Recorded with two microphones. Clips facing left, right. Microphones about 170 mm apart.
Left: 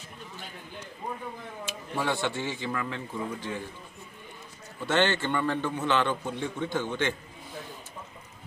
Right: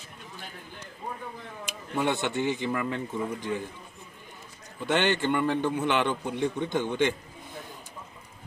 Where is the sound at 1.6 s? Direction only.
20° right (ahead or behind).